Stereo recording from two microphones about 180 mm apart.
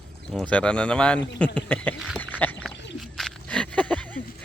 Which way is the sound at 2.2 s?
10° left (ahead or behind).